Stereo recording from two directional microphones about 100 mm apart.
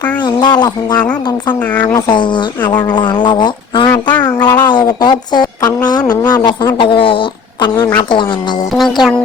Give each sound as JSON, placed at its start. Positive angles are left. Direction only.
{"t": 0.2, "sound": "speech", "side_deg": 45}
{"t": 2.1, "sound": "speech", "side_deg": 50}
{"t": 4.0, "sound": "a sound", "side_deg": 50}
{"t": 4.4, "sound": "speech", "side_deg": 45}